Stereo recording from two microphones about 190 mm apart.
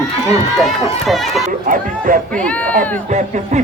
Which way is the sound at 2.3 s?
5° left (ahead or behind).